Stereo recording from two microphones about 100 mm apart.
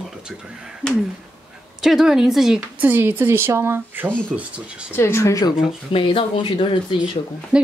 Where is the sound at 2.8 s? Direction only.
20° right (ahead or behind).